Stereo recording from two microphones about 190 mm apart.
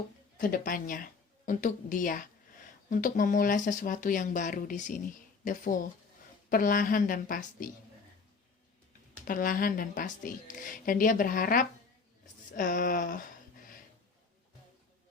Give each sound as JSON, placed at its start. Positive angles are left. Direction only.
{"t": 0.3, "sound": "speech", "side_deg": 50}
{"t": 9.2, "sound": "speech", "side_deg": 45}